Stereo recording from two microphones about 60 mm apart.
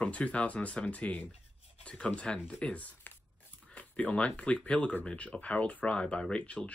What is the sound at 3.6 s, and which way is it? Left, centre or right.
Speech, left.